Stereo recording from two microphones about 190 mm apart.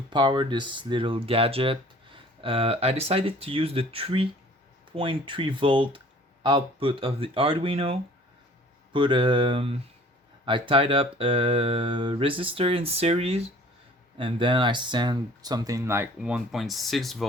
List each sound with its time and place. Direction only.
0.1 s speech: 25° right (ahead or behind); by 17.2 s centre (ahead or behind)